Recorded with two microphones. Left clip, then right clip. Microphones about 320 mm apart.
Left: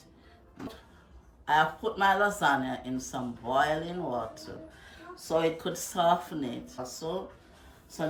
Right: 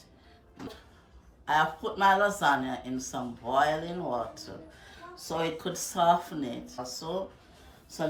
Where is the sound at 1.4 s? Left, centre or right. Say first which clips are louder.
Left 1 dB; centre.